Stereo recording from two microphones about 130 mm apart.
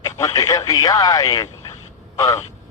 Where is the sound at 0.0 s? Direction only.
25° left (ahead or behind).